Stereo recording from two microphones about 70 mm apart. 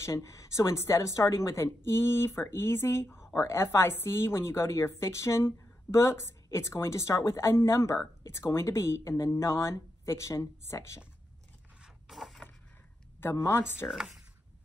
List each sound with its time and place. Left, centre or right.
0.0 s speech: left
12.1 s a sound: centre
13.2 s speech: left
13.8 s speech: centre